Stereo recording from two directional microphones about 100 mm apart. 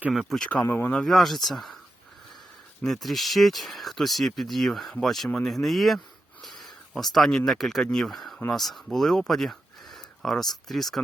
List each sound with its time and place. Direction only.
0.1 s speech: centre (ahead or behind)
0.6 s speech: 25° left (ahead or behind)
0.9 s speech: 5° left (ahead or behind)
2.8 s speech: centre (ahead or behind)